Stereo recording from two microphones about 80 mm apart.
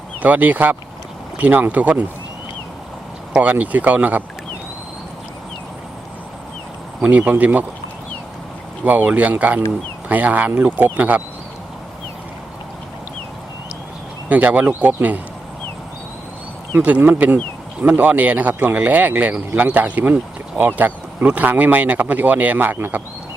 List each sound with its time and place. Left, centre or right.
0.2 s speech: right
3.3 s speech: centre
7.0 s speech: centre
8.8 s speech: centre
14.3 s speech: centre
16.7 s speech: right